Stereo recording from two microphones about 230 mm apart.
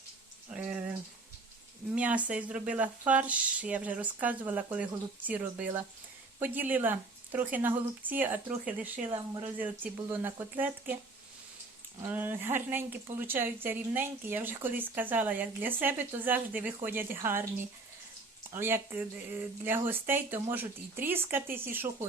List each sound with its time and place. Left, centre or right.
0.5 s speech: centre
2.0 s speech: centre
9.1 s speech: right
9.6 s speech: centre
12.0 s speech: centre
18.5 s speech: centre